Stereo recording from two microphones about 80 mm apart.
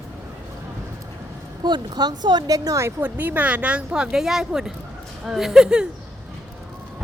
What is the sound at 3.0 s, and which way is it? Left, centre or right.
Speech, right.